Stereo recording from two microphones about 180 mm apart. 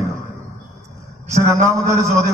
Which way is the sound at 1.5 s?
15° right (ahead or behind).